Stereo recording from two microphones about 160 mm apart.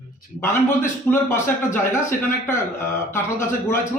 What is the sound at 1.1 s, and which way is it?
A man's voice, 15° left (ahead or behind).